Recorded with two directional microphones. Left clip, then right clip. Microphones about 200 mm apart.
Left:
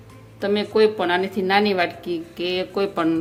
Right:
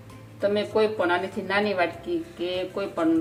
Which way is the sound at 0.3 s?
45° left (ahead or behind).